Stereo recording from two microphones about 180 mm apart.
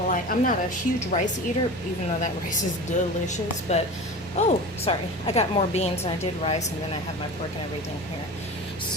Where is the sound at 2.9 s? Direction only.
40° left (ahead or behind).